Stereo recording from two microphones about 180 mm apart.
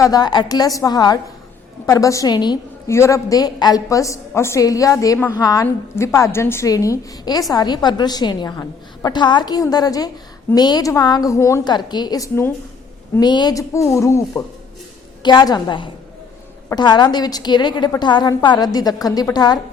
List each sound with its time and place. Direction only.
0.0 s a woman's voice: 20° left (ahead or behind)